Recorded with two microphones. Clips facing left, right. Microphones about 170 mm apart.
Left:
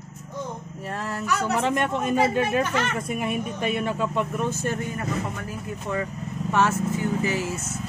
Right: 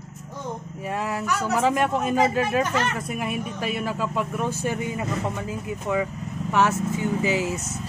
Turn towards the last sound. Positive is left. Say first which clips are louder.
# right 3 dB
turn(degrees=-15)  # may be behind; listen again after turning